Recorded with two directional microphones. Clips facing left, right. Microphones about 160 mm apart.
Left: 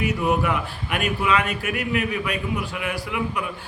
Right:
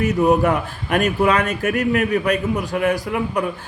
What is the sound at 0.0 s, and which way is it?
A man's voice, 40° right (ahead or behind).